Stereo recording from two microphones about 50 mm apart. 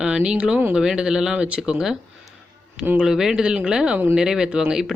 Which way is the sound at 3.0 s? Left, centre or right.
Centre.